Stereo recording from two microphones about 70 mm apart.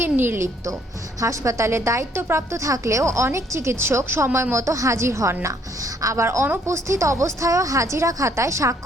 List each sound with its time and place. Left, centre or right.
0.0 s a woman's voice: right
6.2 s a woman's voice: right